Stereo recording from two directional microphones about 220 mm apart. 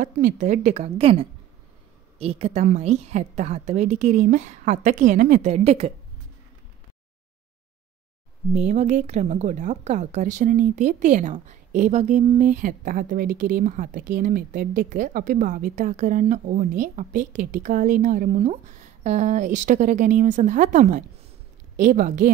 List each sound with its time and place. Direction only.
0.0 s speech: 35° right (ahead or behind)
2.1 s speech: 30° right (ahead or behind)
8.5 s speech: 30° right (ahead or behind)